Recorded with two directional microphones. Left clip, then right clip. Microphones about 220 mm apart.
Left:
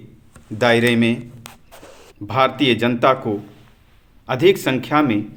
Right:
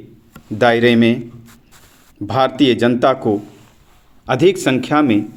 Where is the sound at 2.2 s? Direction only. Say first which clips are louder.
Right 2 dB; 30° right (ahead or behind).